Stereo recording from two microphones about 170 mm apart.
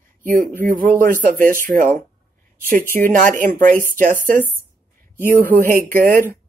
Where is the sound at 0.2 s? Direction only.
55° right (ahead or behind).